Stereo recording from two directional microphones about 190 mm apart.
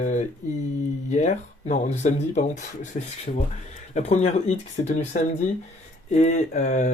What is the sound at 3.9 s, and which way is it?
Speech, 35° left (ahead or behind).